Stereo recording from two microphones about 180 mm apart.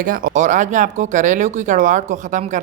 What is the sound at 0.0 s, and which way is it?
Speech, 50° right (ahead or behind).